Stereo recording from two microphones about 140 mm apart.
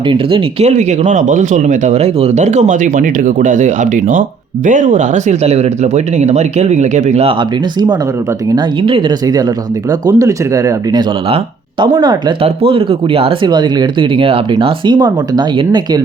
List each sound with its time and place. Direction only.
0.1 s speech: 35° right (ahead or behind)
0.6 s speech: 55° right (ahead or behind)
8.5 s speech: 35° right (ahead or behind)